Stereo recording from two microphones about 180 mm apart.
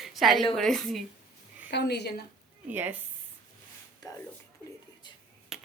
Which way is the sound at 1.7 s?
70° left (ahead or behind).